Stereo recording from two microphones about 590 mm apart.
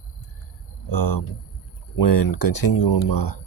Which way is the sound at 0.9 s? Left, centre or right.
Left.